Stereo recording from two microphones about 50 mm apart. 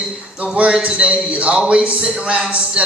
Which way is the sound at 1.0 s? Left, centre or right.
Right.